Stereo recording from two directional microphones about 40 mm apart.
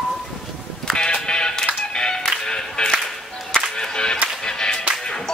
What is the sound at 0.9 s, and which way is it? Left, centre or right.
Music, left.